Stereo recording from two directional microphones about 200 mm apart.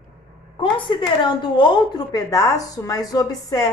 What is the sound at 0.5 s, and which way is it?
A woman's voice, 25° left (ahead or behind).